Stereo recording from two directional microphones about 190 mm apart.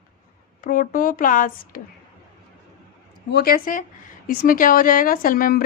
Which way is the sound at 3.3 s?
50° left (ahead or behind).